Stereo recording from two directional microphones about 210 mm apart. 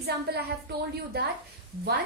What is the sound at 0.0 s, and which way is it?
Speech, 50° right (ahead or behind).